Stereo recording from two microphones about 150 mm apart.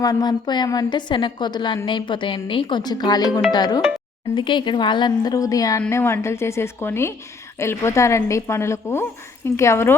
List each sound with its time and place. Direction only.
0.0 s a woman's voice: 25° left (ahead or behind)